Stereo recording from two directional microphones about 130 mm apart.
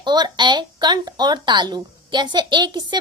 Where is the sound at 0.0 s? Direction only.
35° right (ahead or behind).